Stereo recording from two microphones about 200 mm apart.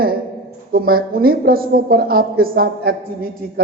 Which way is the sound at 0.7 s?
50° right (ahead or behind).